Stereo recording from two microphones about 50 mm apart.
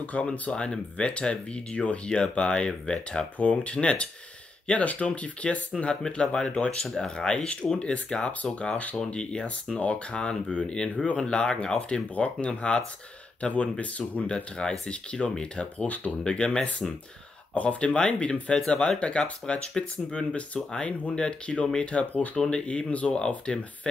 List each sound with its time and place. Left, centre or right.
0.0 s speech: left
14.3 s speech: centre
22.3 s speech: centre